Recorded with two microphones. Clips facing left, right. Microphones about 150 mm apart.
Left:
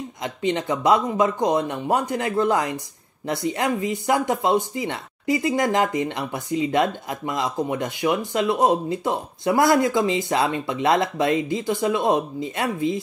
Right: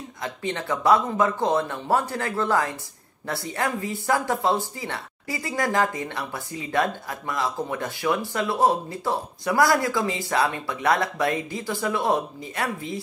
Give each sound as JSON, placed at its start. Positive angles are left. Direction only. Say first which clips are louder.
{"t": 0.2, "sound": "speech", "louder": "left 5 dB", "side_deg": 20}